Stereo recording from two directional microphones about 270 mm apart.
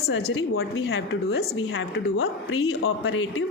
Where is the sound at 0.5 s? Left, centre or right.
Left.